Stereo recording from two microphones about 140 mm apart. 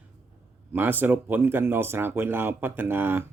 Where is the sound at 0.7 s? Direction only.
15° right (ahead or behind).